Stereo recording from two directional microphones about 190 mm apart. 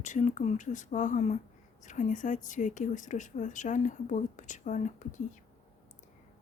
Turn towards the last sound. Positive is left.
turn(degrees=40)  # may be behind; listen again after turning